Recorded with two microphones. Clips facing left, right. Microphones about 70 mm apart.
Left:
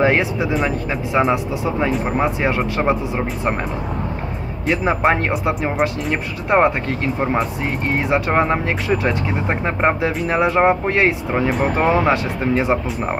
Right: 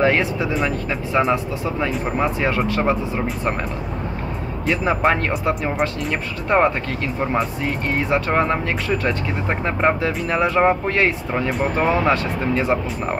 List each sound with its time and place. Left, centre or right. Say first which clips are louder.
0.0 s speech: left 1 dB; centre
4.6 s speech: left 2 dB; left
5.5 s speech: left 1 dB; centre
7.6 s speech: left 1 dB; left